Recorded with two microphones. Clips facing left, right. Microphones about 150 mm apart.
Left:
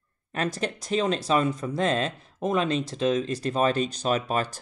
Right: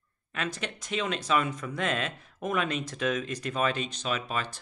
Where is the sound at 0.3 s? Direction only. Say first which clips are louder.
Left 6 dB; 40° left (ahead or behind).